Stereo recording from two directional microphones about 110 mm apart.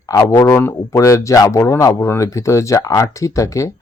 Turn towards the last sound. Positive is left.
turn(degrees=30)  # may be behind; listen again after turning